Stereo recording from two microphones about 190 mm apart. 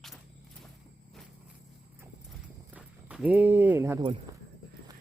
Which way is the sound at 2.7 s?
5° right (ahead or behind).